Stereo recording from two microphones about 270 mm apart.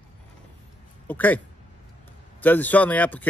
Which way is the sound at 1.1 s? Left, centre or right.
Centre.